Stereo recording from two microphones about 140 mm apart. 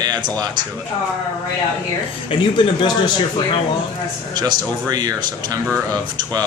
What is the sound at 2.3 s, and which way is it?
Speech, 35° left (ahead or behind).